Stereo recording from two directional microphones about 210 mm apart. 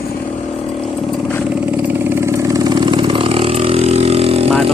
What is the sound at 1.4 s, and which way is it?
Vehicle, 5° right (ahead or behind).